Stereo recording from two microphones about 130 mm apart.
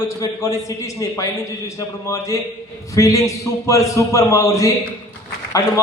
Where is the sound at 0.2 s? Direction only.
25° left (ahead or behind).